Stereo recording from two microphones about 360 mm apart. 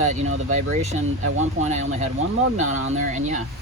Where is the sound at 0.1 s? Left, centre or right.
Centre.